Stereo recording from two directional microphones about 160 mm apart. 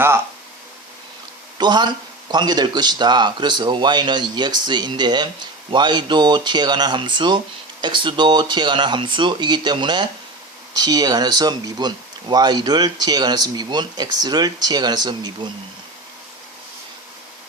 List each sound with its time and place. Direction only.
1.5 s speech: 25° right (ahead or behind)